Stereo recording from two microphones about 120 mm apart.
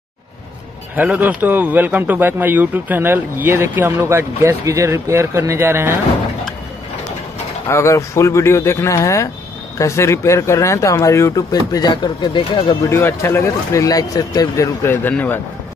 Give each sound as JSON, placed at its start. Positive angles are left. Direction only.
{"t": 0.9, "sound": "speech", "side_deg": -15}
{"t": 7.6, "sound": "speech", "side_deg": 25}
{"t": 12.8, "sound": "speech", "side_deg": 25}